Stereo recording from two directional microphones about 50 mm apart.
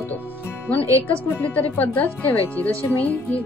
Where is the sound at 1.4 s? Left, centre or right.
Left.